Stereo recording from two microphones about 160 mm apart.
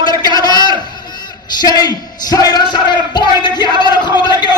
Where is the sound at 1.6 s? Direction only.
25° left (ahead or behind).